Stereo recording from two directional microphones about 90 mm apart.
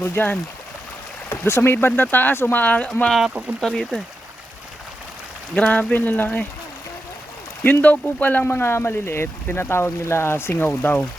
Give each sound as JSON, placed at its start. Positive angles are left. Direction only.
{"t": 0.0, "sound": "speech", "side_deg": 25}
{"t": 3.1, "sound": "speech", "side_deg": 0}
{"t": 5.5, "sound": "speech", "side_deg": 15}
{"t": 7.6, "sound": "speech", "side_deg": 20}